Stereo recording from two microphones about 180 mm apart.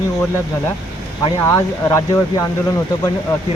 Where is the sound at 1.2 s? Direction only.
15° left (ahead or behind).